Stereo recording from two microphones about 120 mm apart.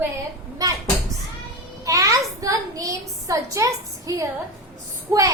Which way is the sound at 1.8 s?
25° right (ahead or behind).